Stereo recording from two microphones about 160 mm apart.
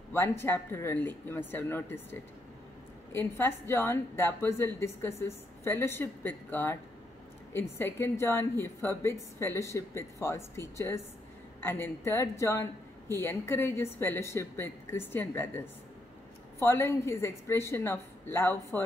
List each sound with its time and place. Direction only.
0.1 s a woman's voice: 15° left (ahead or behind)